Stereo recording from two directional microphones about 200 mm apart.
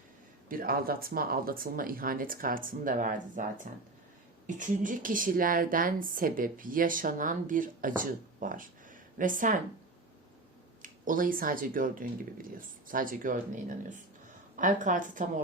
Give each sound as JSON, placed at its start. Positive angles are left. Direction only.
{"t": 0.4, "sound": "a woman's voice", "side_deg": -45}
{"t": 10.8, "sound": "a woman's voice", "side_deg": -40}
{"t": 14.5, "sound": "a woman's voice", "side_deg": -40}